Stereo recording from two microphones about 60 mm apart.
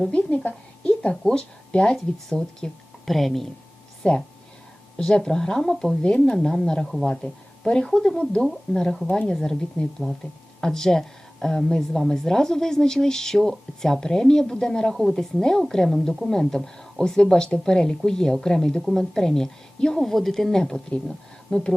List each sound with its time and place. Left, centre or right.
0.2 s a woman's voice: left
3.1 s speech: centre
4.0 s a woman's voice: centre